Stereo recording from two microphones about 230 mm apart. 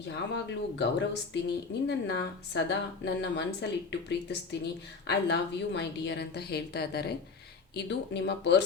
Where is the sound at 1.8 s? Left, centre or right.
Left.